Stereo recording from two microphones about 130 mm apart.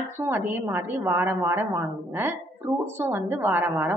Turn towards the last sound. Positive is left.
turn(degrees=-15)  # may be behind; listen again after turning